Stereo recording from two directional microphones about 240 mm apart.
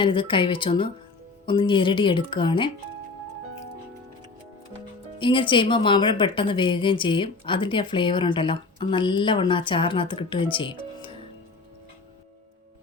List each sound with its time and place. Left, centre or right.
0.0 s a woman's voice: left
5.2 s a woman's voice: left